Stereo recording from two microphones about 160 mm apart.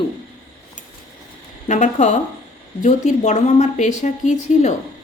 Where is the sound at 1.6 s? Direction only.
50° left (ahead or behind).